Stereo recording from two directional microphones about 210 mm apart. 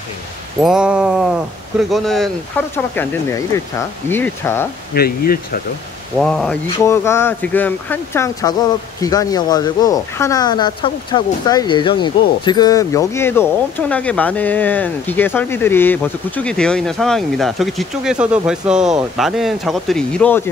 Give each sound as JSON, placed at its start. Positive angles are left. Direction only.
{"t": 0.6, "sound": "speech", "side_deg": -5}
{"t": 4.9, "sound": "speech", "side_deg": 45}
{"t": 6.1, "sound": "speech", "side_deg": 0}